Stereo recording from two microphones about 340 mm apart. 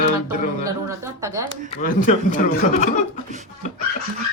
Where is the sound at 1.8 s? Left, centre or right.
Left.